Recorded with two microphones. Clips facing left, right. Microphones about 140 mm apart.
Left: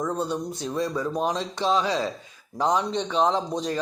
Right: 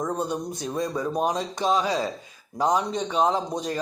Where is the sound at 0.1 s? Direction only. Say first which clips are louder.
Even; 15° right (ahead or behind).